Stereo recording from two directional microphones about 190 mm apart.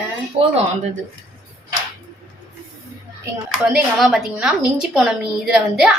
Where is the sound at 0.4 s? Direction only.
35° right (ahead or behind).